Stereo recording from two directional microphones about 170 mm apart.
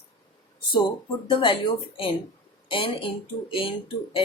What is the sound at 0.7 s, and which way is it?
Speech, 30° left (ahead or behind).